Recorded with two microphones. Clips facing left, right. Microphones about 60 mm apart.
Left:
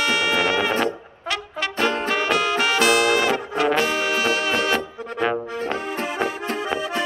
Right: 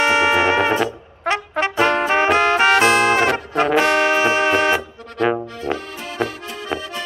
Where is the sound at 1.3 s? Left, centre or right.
Right.